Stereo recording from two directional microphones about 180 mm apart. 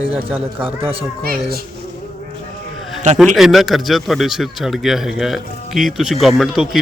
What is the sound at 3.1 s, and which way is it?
Speech, centre (ahead or behind).